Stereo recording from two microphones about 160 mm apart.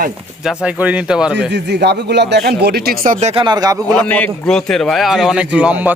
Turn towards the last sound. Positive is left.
turn(degrees=-10)  # may be behind; listen again after turning